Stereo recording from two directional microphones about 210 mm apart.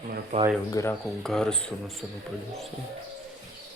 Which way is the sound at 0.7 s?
15° left (ahead or behind).